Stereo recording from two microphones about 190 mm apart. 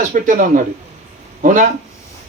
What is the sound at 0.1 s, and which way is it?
A man's voice, 45° right (ahead or behind).